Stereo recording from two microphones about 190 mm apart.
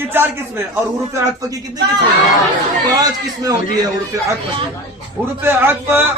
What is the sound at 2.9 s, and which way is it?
Speech, 20° right (ahead or behind).